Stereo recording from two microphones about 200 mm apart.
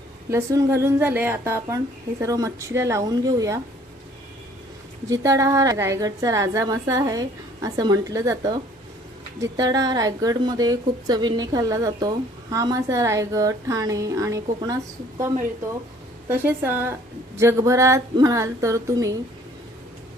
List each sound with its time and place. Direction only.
0.3 s a woman's voice: 15° right (ahead or behind)
5.0 s a woman's voice: 15° right (ahead or behind)
16.3 s a woman's voice: 10° right (ahead or behind)